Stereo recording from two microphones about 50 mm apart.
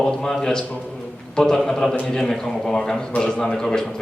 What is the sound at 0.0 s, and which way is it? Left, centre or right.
A man's voice, centre.